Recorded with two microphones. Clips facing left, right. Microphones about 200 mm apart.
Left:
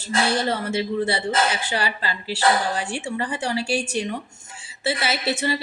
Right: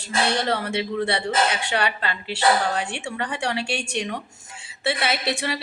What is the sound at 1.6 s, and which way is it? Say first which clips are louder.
Speech: right 1 dB; 65° right (ahead or behind).